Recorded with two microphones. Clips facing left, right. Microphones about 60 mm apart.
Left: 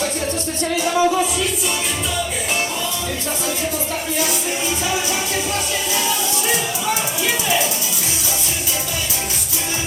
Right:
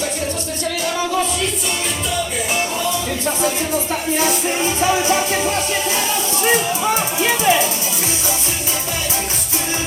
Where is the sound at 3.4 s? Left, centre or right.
Right.